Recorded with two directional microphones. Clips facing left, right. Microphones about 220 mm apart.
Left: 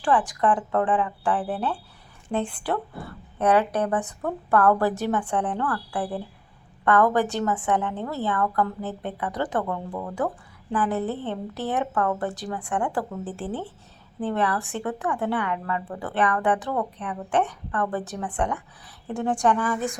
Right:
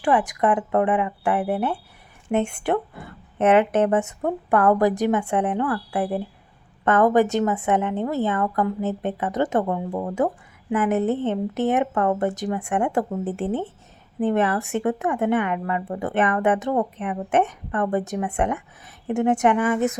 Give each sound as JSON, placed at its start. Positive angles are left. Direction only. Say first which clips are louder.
{"t": 0.0, "sound": "speech", "louder": "right 2 dB", "side_deg": -20}